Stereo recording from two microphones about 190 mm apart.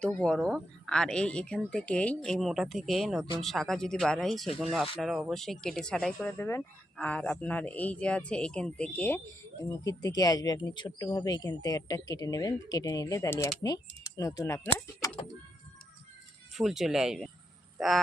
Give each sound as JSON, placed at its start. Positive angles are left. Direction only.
{"t": 0.0, "sound": "a woman's voice", "side_deg": 5}
{"t": 6.3, "sound": "speech", "side_deg": 10}
{"t": 16.6, "sound": "a woman's voice", "side_deg": 0}
{"t": 17.7, "sound": "a sound", "side_deg": 0}